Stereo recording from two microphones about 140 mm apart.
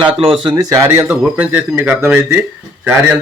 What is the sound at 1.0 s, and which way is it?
A man's voice, 10° right (ahead or behind).